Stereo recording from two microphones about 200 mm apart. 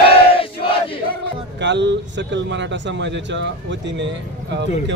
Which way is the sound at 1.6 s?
60° right (ahead or behind).